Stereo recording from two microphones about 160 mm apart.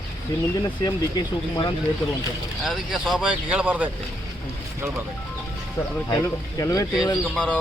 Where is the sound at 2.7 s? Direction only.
Centre (ahead or behind).